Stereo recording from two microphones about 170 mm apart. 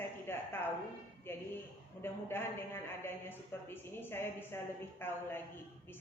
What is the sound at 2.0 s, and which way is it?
Speech, 15° left (ahead or behind).